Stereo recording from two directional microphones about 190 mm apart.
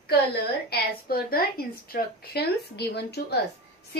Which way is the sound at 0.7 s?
50° left (ahead or behind).